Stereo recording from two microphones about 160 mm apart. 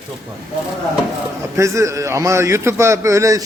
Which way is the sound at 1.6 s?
20° right (ahead or behind).